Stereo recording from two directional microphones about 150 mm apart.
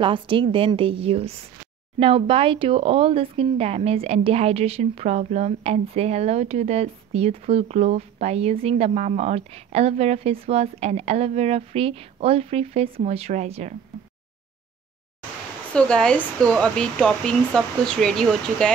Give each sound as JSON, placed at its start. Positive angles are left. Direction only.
{"t": 0.0, "sound": "a woman's voice", "side_deg": -35}
{"t": 15.7, "sound": "speech", "side_deg": 5}